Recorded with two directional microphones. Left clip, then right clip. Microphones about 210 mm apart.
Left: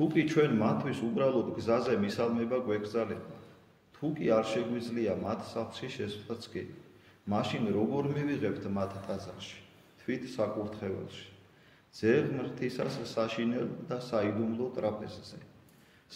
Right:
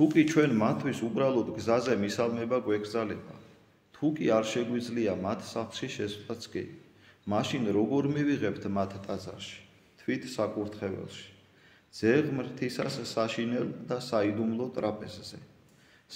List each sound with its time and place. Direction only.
0.0 s speech: 50° right (ahead or behind)